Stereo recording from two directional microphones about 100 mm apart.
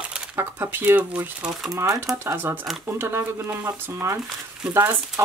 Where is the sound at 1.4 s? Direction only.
5° right (ahead or behind).